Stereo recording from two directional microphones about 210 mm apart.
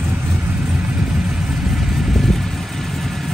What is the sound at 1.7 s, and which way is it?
Vehicle, centre (ahead or behind).